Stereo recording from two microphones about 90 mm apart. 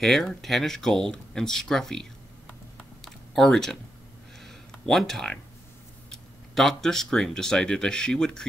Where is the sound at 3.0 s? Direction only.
5° left (ahead or behind).